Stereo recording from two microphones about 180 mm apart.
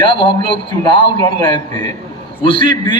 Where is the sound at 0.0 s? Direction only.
30° left (ahead or behind).